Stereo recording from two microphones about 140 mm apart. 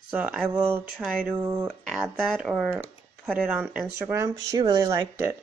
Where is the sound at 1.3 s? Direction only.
20° right (ahead or behind).